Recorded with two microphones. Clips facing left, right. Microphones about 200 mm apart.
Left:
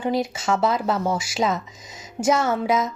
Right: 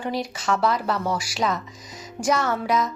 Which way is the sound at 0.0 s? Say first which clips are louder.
Left 4 dB; 25° left (ahead or behind).